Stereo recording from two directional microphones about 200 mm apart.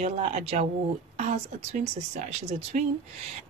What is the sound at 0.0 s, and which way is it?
Speech, 30° right (ahead or behind).